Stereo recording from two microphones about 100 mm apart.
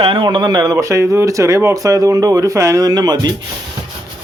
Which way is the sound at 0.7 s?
30° right (ahead or behind).